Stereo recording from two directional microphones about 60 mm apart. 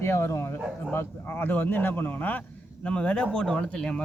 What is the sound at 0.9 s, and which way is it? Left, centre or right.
Speech, left.